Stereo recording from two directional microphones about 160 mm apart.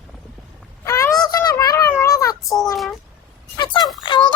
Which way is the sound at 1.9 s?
20° left (ahead or behind).